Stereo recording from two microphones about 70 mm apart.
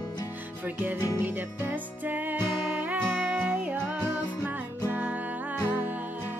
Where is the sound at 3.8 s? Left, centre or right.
Right.